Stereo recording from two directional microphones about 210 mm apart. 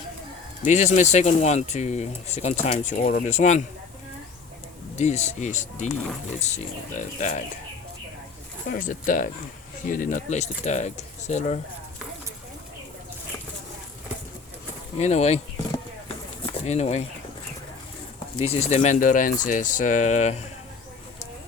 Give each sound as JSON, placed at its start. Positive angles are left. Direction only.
{"t": 0.6, "sound": "speech", "side_deg": 35}
{"t": 4.9, "sound": "speech", "side_deg": 35}
{"t": 6.9, "sound": "speech", "side_deg": 35}
{"t": 8.7, "sound": "speech", "side_deg": 40}
{"t": 14.9, "sound": "speech", "side_deg": 30}
{"t": 18.4, "sound": "speech", "side_deg": 30}